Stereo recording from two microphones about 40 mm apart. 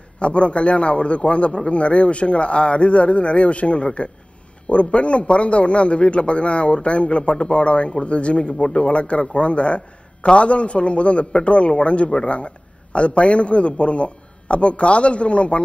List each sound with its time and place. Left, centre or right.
0.2 s a man's voice: left